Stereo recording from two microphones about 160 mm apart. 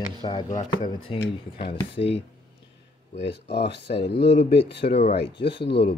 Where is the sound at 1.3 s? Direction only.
35° left (ahead or behind).